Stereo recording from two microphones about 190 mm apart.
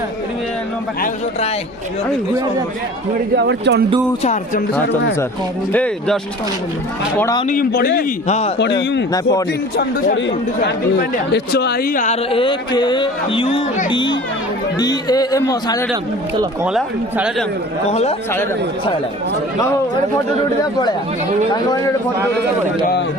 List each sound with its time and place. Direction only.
3.3 s speech: 60° right (ahead or behind)
4.2 s speech: 40° left (ahead or behind)
5.7 s speech: 5° left (ahead or behind)
7.4 s a man's voice: 45° left (ahead or behind)
8.3 s speech: 35° left (ahead or behind)
10.2 s speech: 70° left (ahead or behind); by 12.1 s 45° left (ahead or behind)
12.3 s speech: 25° left (ahead or behind)
16.6 s speech: 5° right (ahead or behind)
17.8 s speech: 35° left (ahead or behind)